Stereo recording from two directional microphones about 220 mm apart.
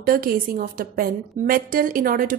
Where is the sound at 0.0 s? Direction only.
40° right (ahead or behind).